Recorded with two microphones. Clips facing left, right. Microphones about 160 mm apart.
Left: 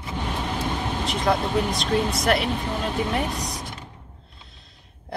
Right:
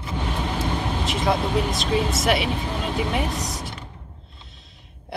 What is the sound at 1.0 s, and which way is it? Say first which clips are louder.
Speech: even; centre (ahead or behind).